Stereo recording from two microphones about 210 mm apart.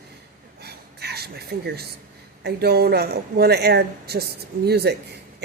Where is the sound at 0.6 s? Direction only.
50° right (ahead or behind).